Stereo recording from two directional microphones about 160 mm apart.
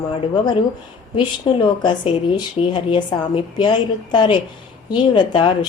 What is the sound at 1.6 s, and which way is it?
A woman's voice, 30° left (ahead or behind).